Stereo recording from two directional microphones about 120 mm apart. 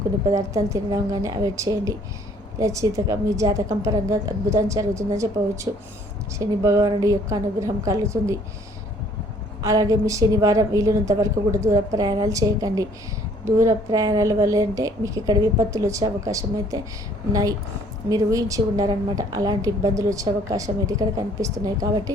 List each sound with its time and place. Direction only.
0.3 s a woman's voice: 25° right (ahead or behind)
9.6 s a woman's voice: 30° right (ahead or behind)
18.1 s a woman's voice: 30° right (ahead or behind)